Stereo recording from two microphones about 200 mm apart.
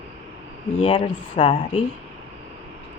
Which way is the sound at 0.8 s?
25° left (ahead or behind).